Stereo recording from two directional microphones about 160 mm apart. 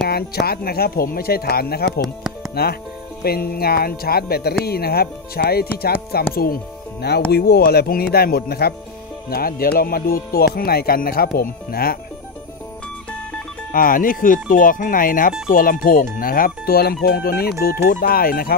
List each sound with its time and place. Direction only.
0.1 s speech: 75° left (ahead or behind)
13.7 s speech: 60° left (ahead or behind)